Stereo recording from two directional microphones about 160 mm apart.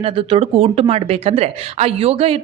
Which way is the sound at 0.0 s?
35° right (ahead or behind).